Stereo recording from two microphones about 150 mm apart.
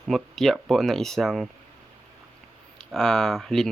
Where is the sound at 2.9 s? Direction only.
5° left (ahead or behind).